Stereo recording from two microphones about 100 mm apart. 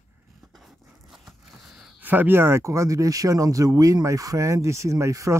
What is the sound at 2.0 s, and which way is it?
Speech, 20° right (ahead or behind).